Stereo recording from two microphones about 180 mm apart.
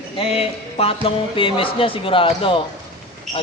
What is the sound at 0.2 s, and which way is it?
Music, 30° left (ahead or behind).